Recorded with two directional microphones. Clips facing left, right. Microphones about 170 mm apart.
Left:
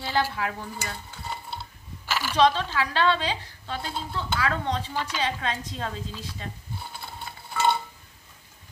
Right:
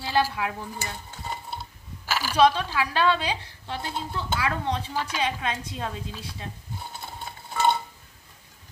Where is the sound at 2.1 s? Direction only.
5° right (ahead or behind).